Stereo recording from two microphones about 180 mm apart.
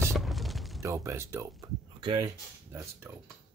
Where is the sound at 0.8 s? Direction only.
15° right (ahead or behind).